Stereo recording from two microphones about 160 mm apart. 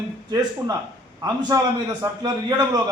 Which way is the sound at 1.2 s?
25° right (ahead or behind).